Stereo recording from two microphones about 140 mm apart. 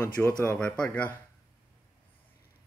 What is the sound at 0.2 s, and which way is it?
Speech, 10° left (ahead or behind).